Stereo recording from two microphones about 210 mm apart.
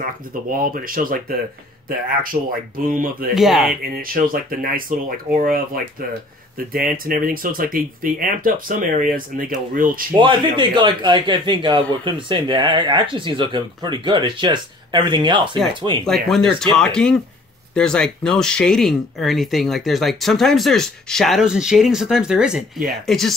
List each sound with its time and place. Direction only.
0.0 s speech: 40° right (ahead or behind)
3.3 s speech: centre (ahead or behind)
3.6 s speech: 45° right (ahead or behind)
10.1 s speech: 25° right (ahead or behind)
16.1 s speech: centre (ahead or behind)